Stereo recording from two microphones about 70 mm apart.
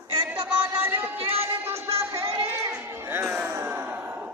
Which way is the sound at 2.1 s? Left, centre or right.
Right.